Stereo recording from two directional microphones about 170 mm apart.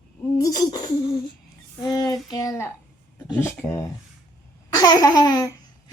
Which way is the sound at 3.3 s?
15° left (ahead or behind).